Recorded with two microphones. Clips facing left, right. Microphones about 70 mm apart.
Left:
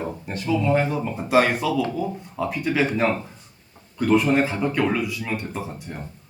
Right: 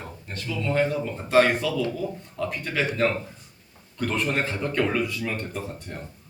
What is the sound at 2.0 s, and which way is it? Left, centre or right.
Speech, left.